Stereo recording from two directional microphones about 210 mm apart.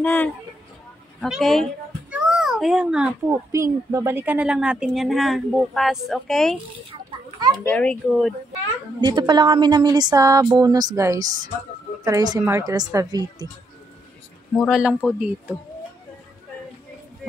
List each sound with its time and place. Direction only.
0.0 s speech: 5° left (ahead or behind)
1.2 s a sound: centre (ahead or behind)
3.5 s speech: 15° right (ahead or behind); by 6.6 s centre (ahead or behind)
6.9 s children playing: 20° right (ahead or behind)
7.6 s speech: 5° left (ahead or behind)
9.0 s speech: 20° right (ahead or behind)
14.6 s speech: 5° right (ahead or behind)